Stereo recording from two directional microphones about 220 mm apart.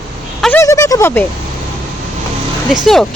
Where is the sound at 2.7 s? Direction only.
Centre (ahead or behind).